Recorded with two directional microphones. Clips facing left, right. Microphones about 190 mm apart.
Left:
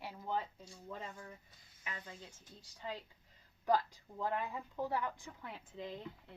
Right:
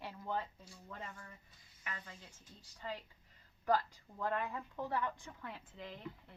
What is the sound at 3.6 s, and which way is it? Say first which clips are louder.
Speech: left 1 dB; 15° left (ahead or behind).